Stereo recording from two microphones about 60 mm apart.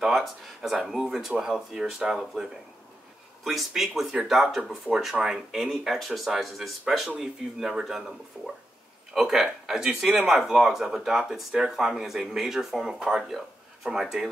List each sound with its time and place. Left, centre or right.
0.0 s speech: centre
3.4 s speech: centre
8.3 s speech: centre
9.1 s speech: centre